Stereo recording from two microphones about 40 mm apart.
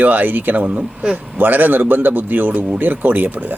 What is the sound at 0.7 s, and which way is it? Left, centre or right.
Speech, right.